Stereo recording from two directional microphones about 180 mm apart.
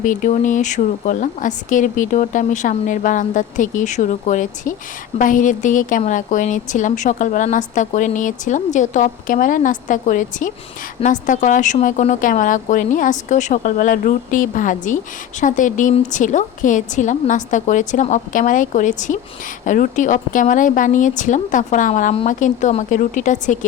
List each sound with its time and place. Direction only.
0.0 s a woman's voice: 45° left (ahead or behind)